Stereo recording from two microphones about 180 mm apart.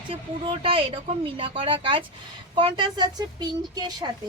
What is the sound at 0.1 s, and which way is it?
A woman's voice, 30° right (ahead or behind).